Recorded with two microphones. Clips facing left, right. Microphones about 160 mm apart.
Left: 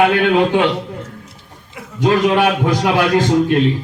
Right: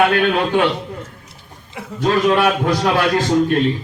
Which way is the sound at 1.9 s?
15° left (ahead or behind).